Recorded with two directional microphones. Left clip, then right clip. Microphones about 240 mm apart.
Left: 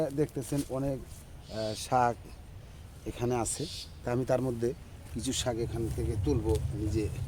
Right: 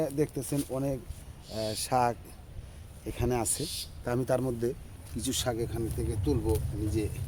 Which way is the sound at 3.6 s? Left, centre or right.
Right.